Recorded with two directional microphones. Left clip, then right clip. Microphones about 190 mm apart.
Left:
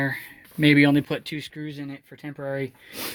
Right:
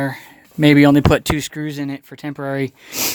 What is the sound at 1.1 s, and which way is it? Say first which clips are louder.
Speech: right 13 dB; 45° right (ahead or behind).